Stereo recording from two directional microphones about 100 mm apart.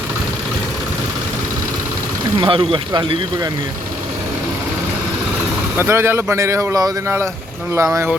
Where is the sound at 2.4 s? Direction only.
60° right (ahead or behind).